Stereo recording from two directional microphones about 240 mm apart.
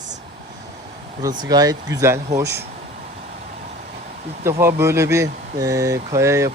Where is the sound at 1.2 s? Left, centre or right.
Centre.